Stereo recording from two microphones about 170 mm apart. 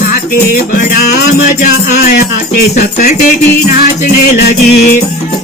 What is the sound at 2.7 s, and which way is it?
Music, 45° left (ahead or behind).